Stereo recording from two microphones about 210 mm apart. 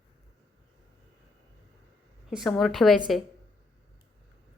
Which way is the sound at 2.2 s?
Centre (ahead or behind).